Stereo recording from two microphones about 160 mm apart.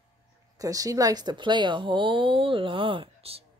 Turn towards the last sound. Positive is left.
turn(degrees=-35)  # may be behind; listen again after turning